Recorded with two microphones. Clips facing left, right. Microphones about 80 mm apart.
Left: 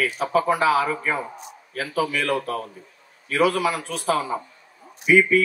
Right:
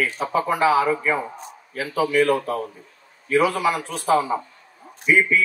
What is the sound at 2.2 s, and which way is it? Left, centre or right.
Speech, right.